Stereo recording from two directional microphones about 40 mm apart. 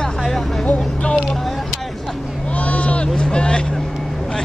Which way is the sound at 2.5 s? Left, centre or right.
Left.